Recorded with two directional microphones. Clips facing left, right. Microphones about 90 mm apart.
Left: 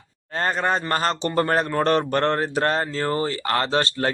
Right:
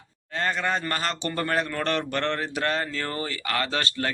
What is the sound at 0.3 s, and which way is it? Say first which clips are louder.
Speech: left 4 dB; 40° left (ahead or behind).